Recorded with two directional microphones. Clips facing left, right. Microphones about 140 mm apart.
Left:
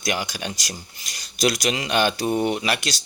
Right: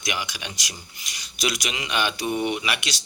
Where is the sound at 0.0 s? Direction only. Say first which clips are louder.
Left 4 dB; 40° left (ahead or behind).